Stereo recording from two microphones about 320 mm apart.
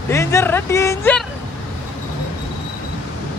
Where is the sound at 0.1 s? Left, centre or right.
Centre.